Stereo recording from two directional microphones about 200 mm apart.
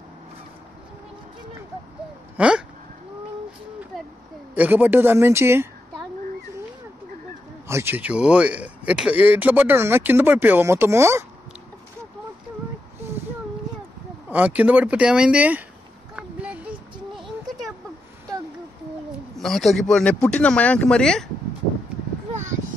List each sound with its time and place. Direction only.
2.3 s speech: 5° right (ahead or behind)
4.6 s a woman's voice: 10° right (ahead or behind)
7.6 s speech: 15° right (ahead or behind)
14.3 s speech: 5° right (ahead or behind)
16.2 s a sound: 5° right (ahead or behind)
19.3 s speech: centre (ahead or behind)
22.3 s a sound: 35° right (ahead or behind)